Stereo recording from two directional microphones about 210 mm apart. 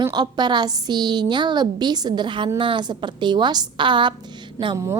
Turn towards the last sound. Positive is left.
turn(degrees=-15)  # may be behind; listen again after turning